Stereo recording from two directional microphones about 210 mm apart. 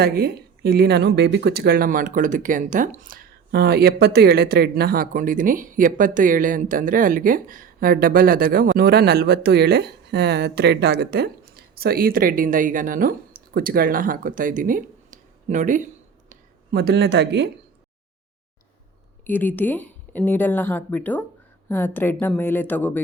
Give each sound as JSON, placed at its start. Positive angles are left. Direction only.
{"t": 0.0, "sound": "speech", "side_deg": -45}
{"t": 16.3, "sound": "speech", "side_deg": -50}
{"t": 19.2, "sound": "speech", "side_deg": 10}